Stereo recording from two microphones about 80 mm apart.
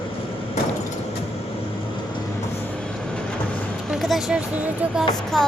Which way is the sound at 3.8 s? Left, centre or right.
Centre.